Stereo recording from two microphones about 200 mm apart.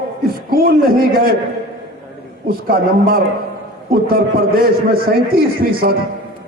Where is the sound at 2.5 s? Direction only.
50° right (ahead or behind).